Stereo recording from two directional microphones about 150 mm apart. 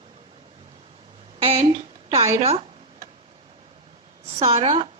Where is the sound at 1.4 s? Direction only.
40° right (ahead or behind).